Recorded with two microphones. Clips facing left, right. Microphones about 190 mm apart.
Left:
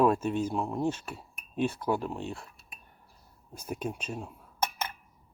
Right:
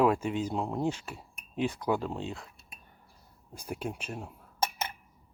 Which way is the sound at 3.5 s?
15° right (ahead or behind).